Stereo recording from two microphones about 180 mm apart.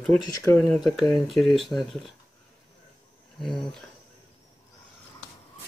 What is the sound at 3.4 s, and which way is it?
Speech, 5° left (ahead or behind).